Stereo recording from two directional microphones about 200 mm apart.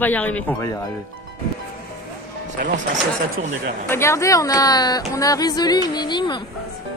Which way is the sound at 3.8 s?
15° left (ahead or behind).